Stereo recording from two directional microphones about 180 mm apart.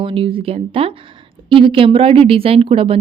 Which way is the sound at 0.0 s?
30° right (ahead or behind).